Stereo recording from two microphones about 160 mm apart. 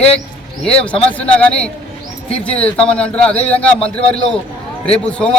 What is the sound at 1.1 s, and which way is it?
A man's voice, 10° left (ahead or behind).